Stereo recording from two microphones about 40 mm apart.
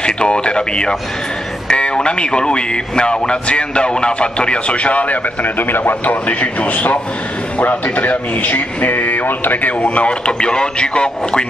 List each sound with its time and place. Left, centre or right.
0.0 s speech: left